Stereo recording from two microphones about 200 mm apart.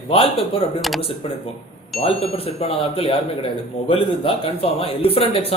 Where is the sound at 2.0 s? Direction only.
30° left (ahead or behind).